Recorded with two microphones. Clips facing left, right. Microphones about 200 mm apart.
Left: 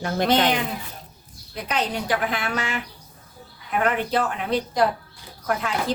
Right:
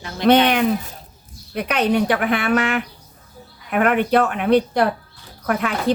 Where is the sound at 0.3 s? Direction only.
65° right (ahead or behind).